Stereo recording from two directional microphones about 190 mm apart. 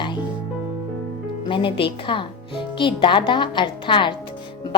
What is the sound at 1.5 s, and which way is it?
A woman's voice, 25° left (ahead or behind).